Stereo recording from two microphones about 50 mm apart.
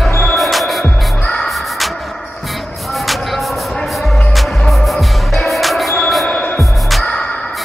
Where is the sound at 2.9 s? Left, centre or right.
Centre.